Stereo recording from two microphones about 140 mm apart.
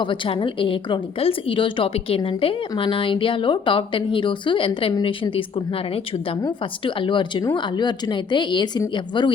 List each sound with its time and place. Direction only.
0.0 s a woman's voice: 35° left (ahead or behind)